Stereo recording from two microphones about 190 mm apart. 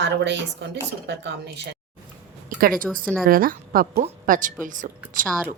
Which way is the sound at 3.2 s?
50° right (ahead or behind).